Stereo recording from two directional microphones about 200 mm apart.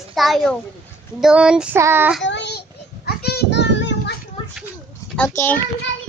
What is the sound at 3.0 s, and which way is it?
Children playing, 55° left (ahead or behind).